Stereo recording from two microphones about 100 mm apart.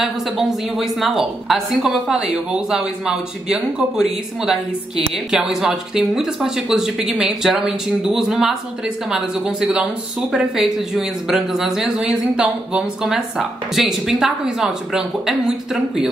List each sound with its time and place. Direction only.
0.0 s a woman's voice: 5° right (ahead or behind)